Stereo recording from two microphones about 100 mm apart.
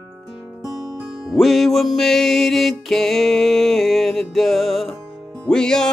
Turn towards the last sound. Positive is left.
turn(degrees=5)  # may be behind; listen again after turning